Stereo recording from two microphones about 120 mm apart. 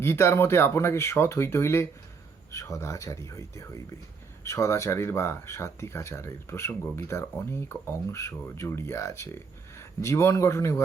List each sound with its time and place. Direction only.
0.0 s speech: 20° left (ahead or behind)